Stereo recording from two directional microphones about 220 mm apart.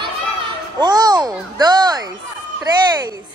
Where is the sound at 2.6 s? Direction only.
15° right (ahead or behind).